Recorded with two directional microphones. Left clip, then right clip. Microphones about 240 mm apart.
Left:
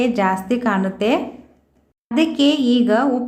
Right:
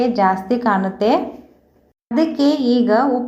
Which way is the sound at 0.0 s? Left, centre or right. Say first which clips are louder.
Right 2 dB; left.